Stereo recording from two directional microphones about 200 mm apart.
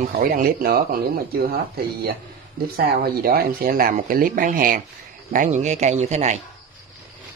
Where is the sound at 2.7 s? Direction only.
50° right (ahead or behind); by 6.3 s 35° right (ahead or behind).